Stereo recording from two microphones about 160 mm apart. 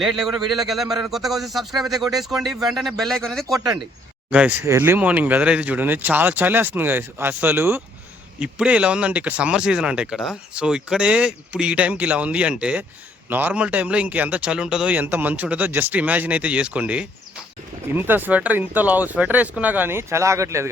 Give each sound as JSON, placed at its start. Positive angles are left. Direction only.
{"t": 0.0, "sound": "a man's voice", "side_deg": 0}